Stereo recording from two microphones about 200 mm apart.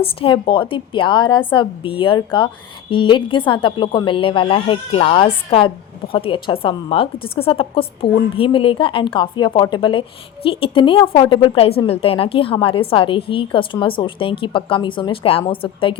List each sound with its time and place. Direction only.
0.0 s a woman's voice: 25° left (ahead or behind)